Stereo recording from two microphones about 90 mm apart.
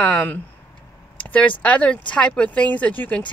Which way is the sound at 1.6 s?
15° left (ahead or behind).